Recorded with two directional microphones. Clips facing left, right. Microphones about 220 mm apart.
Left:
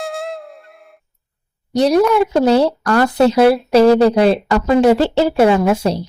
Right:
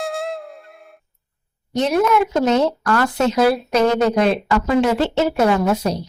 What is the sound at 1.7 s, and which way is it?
A woman's voice, 35° left (ahead or behind).